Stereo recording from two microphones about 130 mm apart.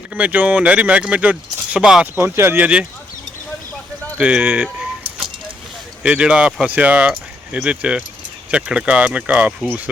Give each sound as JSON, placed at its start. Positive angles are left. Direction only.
{"t": 0.1, "sound": "speech", "side_deg": -10}
{"t": 2.1, "sound": "speech", "side_deg": -20}
{"t": 4.2, "sound": "keys jangling", "side_deg": -10}
{"t": 6.0, "sound": "speech", "side_deg": -10}